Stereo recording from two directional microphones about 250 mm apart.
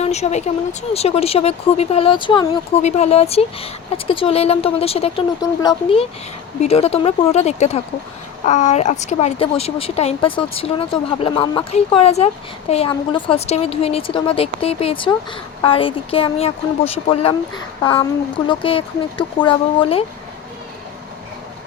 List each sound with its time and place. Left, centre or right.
0.0 s speech: left
18.4 s speech: left